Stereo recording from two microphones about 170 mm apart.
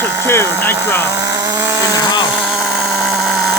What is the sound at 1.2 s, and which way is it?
Chainsaw, 20° right (ahead or behind).